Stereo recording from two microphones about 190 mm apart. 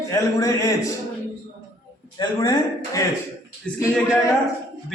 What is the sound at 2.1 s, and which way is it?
Speech, 20° left (ahead or behind).